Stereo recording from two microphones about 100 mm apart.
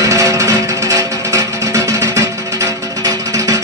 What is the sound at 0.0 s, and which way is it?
Music, 35° right (ahead or behind).